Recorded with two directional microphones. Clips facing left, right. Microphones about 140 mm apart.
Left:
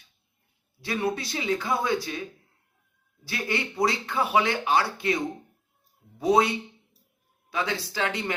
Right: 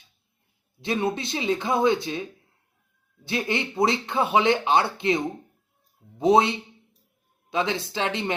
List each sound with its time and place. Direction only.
0.8 s speech: 25° right (ahead or behind)
3.2 s speech: 20° right (ahead or behind)
7.5 s speech: 20° right (ahead or behind)